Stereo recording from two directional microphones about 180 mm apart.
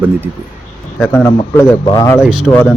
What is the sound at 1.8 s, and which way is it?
Speech, 20° left (ahead or behind).